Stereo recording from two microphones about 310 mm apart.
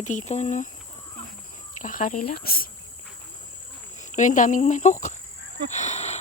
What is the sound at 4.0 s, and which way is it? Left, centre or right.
Speech, left.